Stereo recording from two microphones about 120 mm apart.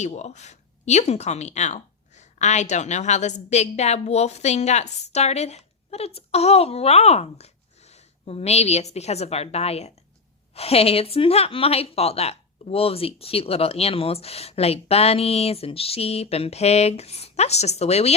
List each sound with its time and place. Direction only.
0.0 s speech: 70° left (ahead or behind)